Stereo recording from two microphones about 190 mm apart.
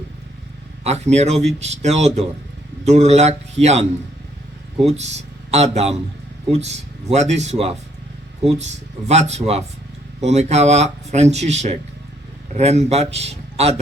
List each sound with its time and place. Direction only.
0.9 s speech: 35° right (ahead or behind)
4.9 s speech: 35° right (ahead or behind)
9.0 s speech: 35° right (ahead or behind)